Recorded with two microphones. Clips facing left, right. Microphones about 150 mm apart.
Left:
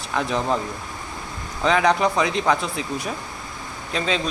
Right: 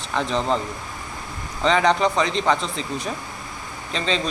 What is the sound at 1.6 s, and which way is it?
Speech, 5° left (ahead or behind).